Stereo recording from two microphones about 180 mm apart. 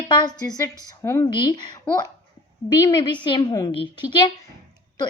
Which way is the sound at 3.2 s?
25° left (ahead or behind).